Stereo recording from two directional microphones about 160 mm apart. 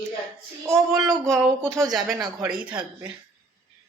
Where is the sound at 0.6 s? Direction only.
20° right (ahead or behind).